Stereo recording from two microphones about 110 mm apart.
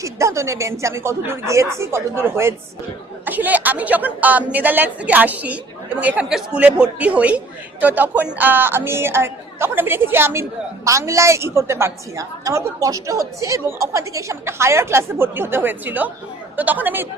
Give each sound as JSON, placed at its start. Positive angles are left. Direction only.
{"t": 0.0, "sound": "a woman's voice", "side_deg": -25}